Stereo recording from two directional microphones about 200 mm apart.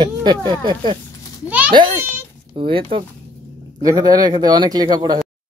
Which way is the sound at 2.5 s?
25° right (ahead or behind).